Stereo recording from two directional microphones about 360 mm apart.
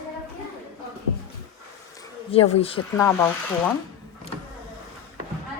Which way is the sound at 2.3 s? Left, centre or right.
Centre.